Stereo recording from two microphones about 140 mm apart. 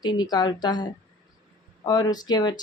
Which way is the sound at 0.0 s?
30° left (ahead or behind).